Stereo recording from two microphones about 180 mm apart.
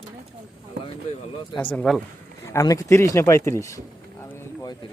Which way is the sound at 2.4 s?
15° left (ahead or behind).